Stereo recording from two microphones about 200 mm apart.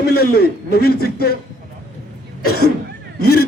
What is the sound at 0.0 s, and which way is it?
A man's voice, 50° left (ahead or behind).